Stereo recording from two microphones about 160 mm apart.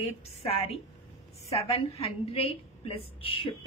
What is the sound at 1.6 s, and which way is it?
A woman's voice, 35° left (ahead or behind).